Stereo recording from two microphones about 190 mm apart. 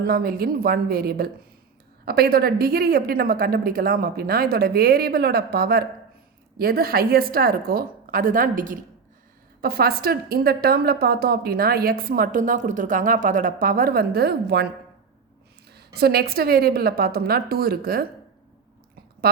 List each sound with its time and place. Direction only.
0.0 s a woman's voice: 50° right (ahead or behind)
15.7 s a woman's voice: 55° right (ahead or behind)